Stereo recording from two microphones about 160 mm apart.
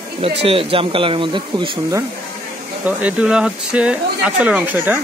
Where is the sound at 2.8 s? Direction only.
5° right (ahead or behind).